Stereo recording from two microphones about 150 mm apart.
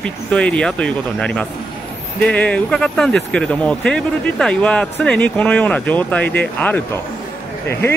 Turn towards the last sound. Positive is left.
turn(degrees=15)  # may be behind; listen again after turning